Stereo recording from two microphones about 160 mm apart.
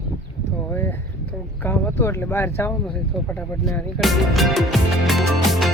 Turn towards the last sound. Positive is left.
turn(degrees=0)  # may be behind; listen again after turning